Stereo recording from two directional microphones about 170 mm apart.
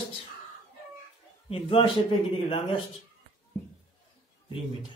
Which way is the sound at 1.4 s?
35° left (ahead or behind).